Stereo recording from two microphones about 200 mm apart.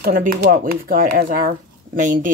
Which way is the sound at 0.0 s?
50° right (ahead or behind).